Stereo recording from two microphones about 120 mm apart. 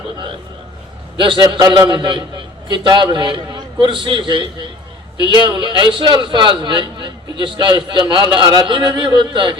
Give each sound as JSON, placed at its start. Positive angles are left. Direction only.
{"t": 1.1, "sound": "a man's voice", "side_deg": -40}